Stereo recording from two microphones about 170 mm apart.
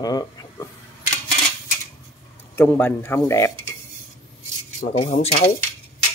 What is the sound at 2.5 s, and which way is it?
Speech, 10° left (ahead or behind).